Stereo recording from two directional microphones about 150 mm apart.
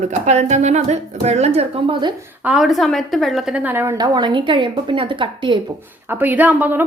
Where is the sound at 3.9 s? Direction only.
30° right (ahead or behind).